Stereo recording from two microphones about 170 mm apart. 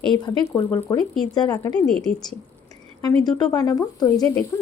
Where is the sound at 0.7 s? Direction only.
10° left (ahead or behind).